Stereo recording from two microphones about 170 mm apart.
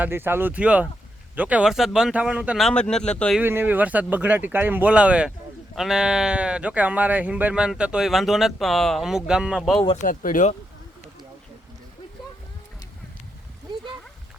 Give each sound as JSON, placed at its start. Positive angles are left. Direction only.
{"t": 0.0, "sound": "speech", "side_deg": -15}
{"t": 3.4, "sound": "speech", "side_deg": -10}
{"t": 9.8, "sound": "speech", "side_deg": 40}
{"t": 10.1, "sound": "speech", "side_deg": 50}